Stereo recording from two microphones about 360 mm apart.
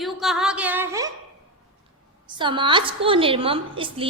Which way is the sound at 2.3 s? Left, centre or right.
Centre.